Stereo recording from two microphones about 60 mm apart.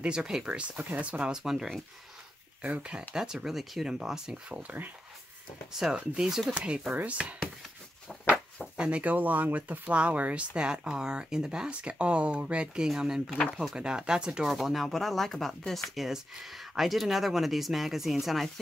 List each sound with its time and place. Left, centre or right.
0.0 s speech: centre
1.3 s speech: centre
2.8 s speech: centre
5.7 s speech: centre
6.9 s speech: right
8.7 s speech: centre
9.1 s speech: right
12.8 s speech: centre